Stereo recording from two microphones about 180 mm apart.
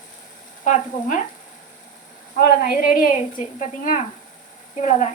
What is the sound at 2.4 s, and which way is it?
Speech, 60° left (ahead or behind).